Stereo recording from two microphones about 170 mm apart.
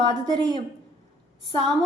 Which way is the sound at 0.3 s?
25° right (ahead or behind).